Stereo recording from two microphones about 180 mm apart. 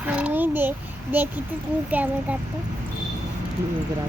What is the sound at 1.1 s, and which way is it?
Speech, 10° right (ahead or behind).